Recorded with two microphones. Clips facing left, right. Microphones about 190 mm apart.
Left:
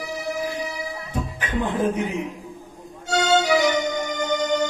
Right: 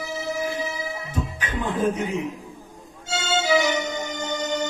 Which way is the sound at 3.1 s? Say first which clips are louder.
Left 4 dB; 25° right (ahead or behind).